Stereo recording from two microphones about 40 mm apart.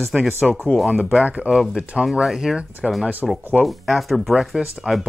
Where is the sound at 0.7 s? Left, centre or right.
Centre.